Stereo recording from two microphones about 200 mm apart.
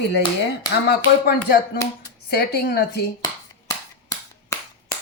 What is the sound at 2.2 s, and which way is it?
Speech, 50° left (ahead or behind).